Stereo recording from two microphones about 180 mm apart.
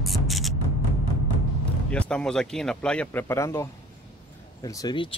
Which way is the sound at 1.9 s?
5° left (ahead or behind).